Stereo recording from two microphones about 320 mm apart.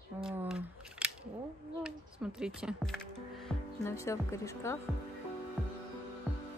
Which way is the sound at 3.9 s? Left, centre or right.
Centre.